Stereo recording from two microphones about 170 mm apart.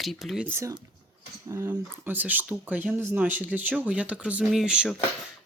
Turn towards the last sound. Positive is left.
turn(degrees=-5)  # may be behind; listen again after turning